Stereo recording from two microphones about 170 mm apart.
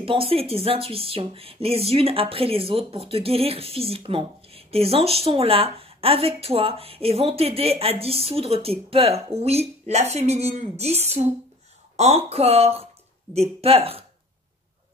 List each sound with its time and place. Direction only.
0.0 s speech: 35° right (ahead or behind)